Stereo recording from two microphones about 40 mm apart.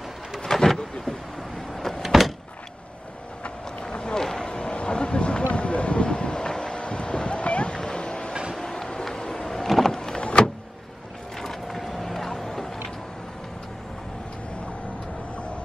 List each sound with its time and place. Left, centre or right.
0.4 s vehicle: centre
1.7 s power windows: centre
2.0 s power windows: centre
3.4 s a sound: left
6.8 s vehicle: left
8.5 s power windows: centre
9.9 s power windows: centre
11.3 s vehicle: centre